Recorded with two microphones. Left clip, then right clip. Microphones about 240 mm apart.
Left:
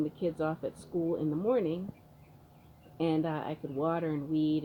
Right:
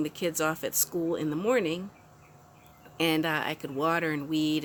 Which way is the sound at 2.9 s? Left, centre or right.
Right.